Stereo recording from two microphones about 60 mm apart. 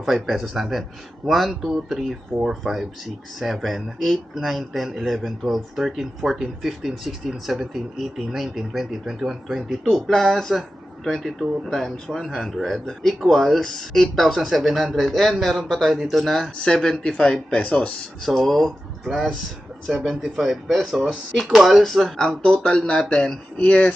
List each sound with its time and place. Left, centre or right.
0.0 s speech: centre
9.8 s speech: centre
18.3 s speech: centre; by 23.9 s left